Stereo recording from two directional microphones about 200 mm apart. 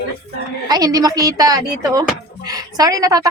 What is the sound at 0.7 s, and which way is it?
A woman's voice, 20° right (ahead or behind).